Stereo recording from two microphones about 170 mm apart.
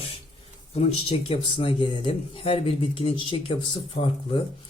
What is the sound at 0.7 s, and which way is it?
Speech, 35° left (ahead or behind).